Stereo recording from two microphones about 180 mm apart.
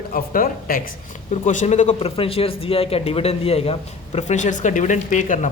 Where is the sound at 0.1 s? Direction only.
50° left (ahead or behind).